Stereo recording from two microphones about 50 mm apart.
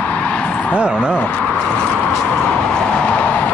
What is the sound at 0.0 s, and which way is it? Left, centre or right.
Vehicle, left.